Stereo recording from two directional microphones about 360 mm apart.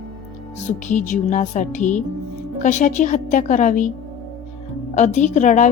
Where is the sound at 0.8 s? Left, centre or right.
Centre.